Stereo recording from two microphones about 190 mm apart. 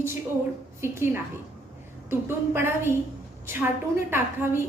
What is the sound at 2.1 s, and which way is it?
A woman's voice, 10° right (ahead or behind).